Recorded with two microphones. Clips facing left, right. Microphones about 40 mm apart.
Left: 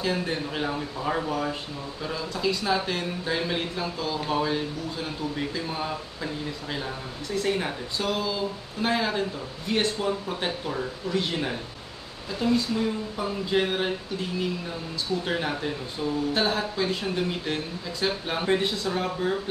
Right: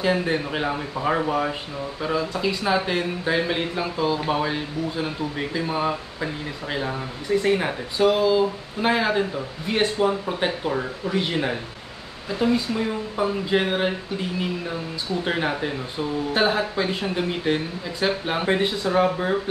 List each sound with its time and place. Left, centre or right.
0.0 s speech: right
15.2 s speech: right